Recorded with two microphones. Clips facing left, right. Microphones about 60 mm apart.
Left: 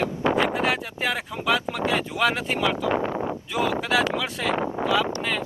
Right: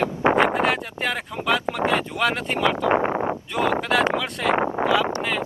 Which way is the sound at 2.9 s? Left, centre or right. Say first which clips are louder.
Right 4 dB; right.